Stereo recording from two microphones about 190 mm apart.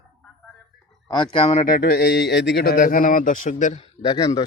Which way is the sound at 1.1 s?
25° left (ahead or behind).